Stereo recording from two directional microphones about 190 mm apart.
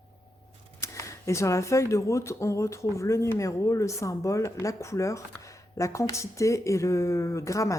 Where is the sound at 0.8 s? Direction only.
15° left (ahead or behind).